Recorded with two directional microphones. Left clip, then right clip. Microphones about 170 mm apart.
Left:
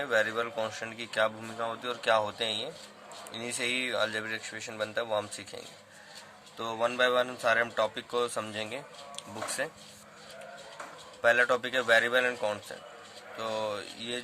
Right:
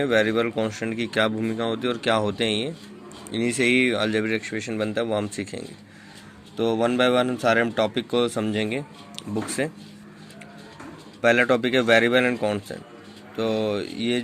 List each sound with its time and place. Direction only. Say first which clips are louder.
0.0 s a man's voice: right 7 dB; 25° right (ahead or behind)
1.8 s a man's voice: right 3 dB; 20° right (ahead or behind)
11.2 s a man's voice: right 6 dB; 25° right (ahead or behind)